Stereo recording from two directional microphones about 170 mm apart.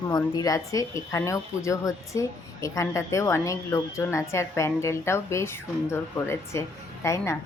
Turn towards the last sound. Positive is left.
turn(degrees=15)  # may be behind; listen again after turning